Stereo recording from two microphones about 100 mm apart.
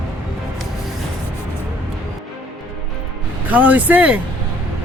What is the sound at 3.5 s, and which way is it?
Speech, 15° right (ahead or behind).